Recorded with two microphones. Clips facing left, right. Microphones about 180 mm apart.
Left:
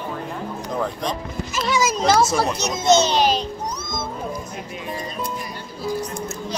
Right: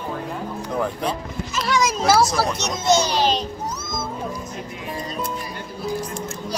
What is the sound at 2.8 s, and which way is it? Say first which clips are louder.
Music: left 2 dB; 20° left (ahead or behind).